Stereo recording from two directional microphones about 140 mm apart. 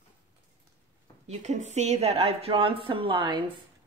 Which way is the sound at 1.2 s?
55° right (ahead or behind).